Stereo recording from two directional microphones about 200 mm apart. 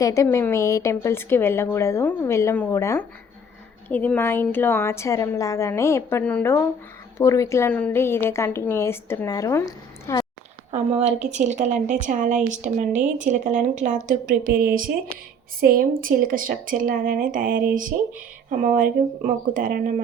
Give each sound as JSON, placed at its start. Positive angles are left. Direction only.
{"t": 0.0, "sound": "a woman's voice", "side_deg": 15}
{"t": 10.7, "sound": "a woman's voice", "side_deg": -35}